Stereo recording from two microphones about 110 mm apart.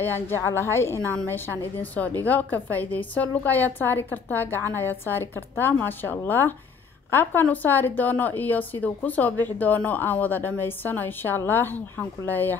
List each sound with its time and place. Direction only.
0.0 s a woman's voice: 20° left (ahead or behind)